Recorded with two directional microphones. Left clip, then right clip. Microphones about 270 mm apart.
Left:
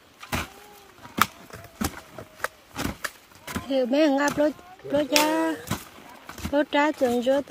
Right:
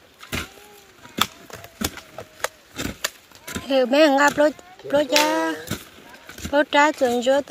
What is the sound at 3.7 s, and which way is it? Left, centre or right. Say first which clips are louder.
Speech: right 6 dB; centre.